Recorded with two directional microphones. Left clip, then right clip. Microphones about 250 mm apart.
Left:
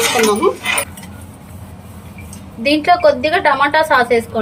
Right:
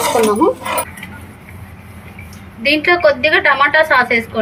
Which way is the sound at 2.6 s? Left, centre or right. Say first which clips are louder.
Even; centre.